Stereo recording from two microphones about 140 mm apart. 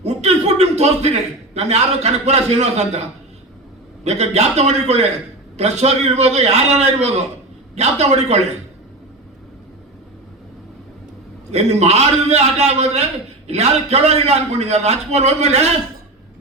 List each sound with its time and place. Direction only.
0.0 s a man's voice: 50° right (ahead or behind)
11.5 s a man's voice: 50° right (ahead or behind)